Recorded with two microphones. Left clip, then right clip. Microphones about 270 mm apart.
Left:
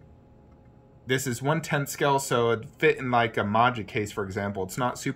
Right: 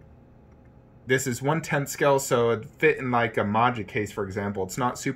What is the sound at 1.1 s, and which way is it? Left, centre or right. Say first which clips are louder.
Speech: right 2 dB; centre.